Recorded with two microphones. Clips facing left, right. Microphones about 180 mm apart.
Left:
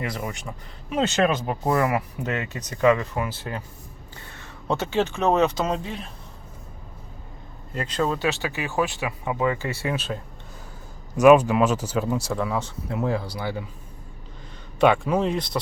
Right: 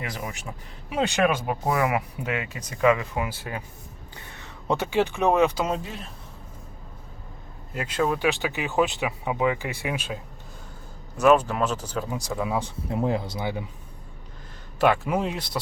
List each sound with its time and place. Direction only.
0.0 s speech: 5° right (ahead or behind)
7.7 s speech: 10° right (ahead or behind)
11.2 s speech: 10° left (ahead or behind)
12.5 s speech: 15° right (ahead or behind)
14.8 s speech: 5° right (ahead or behind)